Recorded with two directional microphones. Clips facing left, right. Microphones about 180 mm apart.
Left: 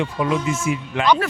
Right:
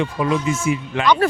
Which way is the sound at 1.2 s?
35° right (ahead or behind).